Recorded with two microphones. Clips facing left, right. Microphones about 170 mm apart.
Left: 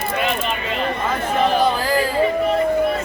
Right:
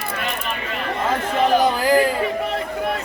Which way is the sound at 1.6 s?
20° right (ahead or behind).